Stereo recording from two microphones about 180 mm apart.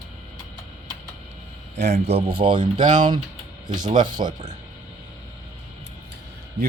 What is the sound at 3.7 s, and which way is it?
Speech, 25° right (ahead or behind).